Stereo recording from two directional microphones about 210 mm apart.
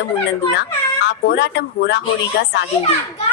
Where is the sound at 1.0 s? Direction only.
55° left (ahead or behind).